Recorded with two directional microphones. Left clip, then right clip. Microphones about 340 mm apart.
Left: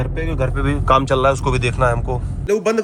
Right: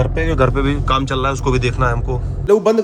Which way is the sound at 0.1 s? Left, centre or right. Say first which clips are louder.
Right 6 dB; centre.